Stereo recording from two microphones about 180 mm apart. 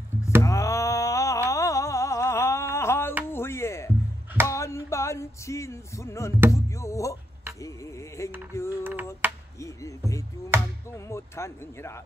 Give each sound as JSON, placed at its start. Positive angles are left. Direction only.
{"t": 0.4, "sound": "a sound", "side_deg": 15}
{"t": 4.5, "sound": "music", "side_deg": 15}
{"t": 8.5, "sound": "mechanisms", "side_deg": 15}
{"t": 9.2, "sound": "a sound", "side_deg": -10}
{"t": 9.6, "sound": "music", "side_deg": 15}
{"t": 10.5, "sound": "music", "side_deg": -15}
{"t": 10.9, "sound": "speech", "side_deg": 15}